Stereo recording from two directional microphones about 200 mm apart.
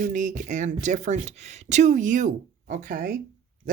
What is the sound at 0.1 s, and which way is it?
Speech, 40° right (ahead or behind).